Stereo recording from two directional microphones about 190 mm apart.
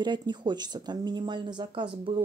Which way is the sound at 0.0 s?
25° right (ahead or behind).